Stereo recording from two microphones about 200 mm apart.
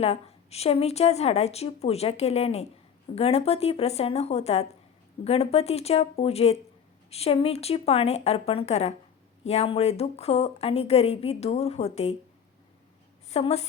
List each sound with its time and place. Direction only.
0.0 s speech: 30° left (ahead or behind)
13.3 s speech: 30° left (ahead or behind)